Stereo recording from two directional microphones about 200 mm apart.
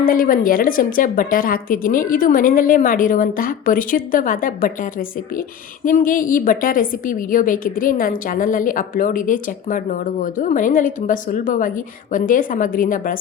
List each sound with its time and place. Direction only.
0.1 s a woman's voice: 45° left (ahead or behind)